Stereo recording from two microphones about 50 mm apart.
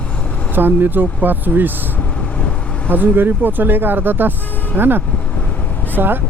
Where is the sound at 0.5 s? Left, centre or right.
Right.